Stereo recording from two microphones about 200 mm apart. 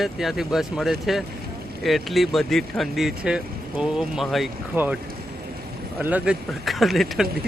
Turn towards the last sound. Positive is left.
turn(degrees=0)  # may be behind; listen again after turning